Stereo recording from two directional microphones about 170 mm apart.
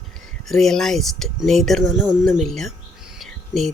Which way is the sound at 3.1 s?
Centre (ahead or behind).